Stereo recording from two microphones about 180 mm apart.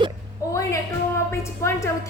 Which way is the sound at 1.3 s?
15° left (ahead or behind).